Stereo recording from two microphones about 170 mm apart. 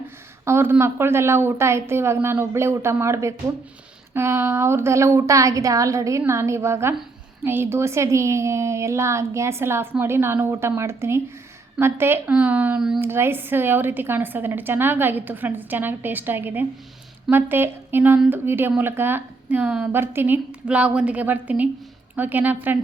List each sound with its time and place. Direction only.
0.4 s a woman's voice: 15° right (ahead or behind)